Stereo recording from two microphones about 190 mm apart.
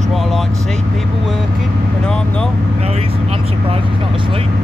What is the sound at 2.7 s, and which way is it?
Speech, 30° right (ahead or behind).